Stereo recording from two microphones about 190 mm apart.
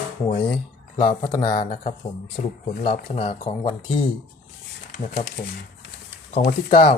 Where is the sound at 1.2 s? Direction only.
20° left (ahead or behind).